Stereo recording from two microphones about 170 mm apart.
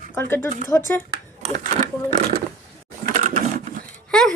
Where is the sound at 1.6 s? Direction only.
50° right (ahead or behind).